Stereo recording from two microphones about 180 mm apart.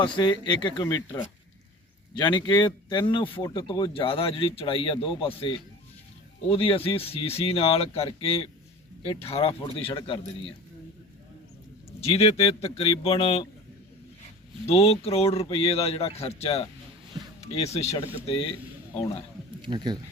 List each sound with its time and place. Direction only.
0.0 s speech: 25° left (ahead or behind)
11.9 s speech: 35° left (ahead or behind)
14.7 s speech: 35° left (ahead or behind)
19.6 s speech: 25° right (ahead or behind)